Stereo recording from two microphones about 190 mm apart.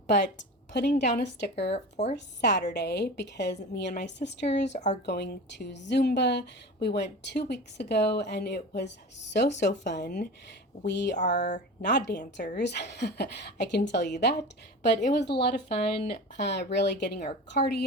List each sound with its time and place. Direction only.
0.7 s a woman's voice: 65° left (ahead or behind)
1.7 s speech: 35° left (ahead or behind)
2.1 s a woman's voice: 65° left (ahead or behind)
15.4 s speech: 30° left (ahead or behind)
16.4 s a woman's voice: 65° left (ahead or behind)